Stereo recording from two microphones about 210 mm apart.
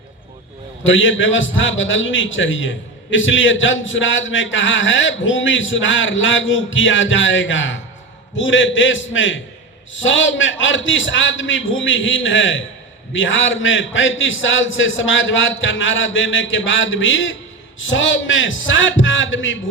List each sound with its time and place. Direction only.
0.9 s a man's voice: 65° left (ahead or behind)